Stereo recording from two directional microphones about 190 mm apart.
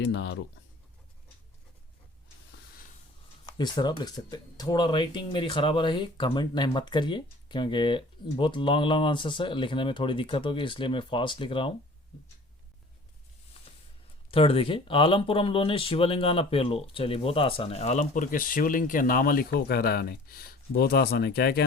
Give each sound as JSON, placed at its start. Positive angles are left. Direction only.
{"t": 0.0, "sound": "speech", "side_deg": 70}
{"t": 3.4, "sound": "speech", "side_deg": 20}
{"t": 14.3, "sound": "speech", "side_deg": 30}